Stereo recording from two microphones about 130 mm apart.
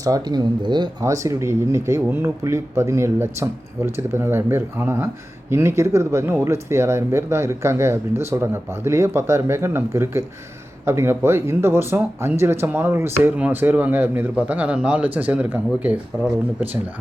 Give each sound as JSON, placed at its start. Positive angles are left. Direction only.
{"t": 0.0, "sound": "speech", "side_deg": -30}
{"t": 1.0, "sound": "speech", "side_deg": -25}